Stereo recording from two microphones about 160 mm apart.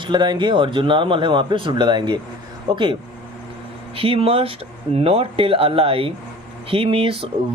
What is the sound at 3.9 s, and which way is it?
Speech, 35° right (ahead or behind).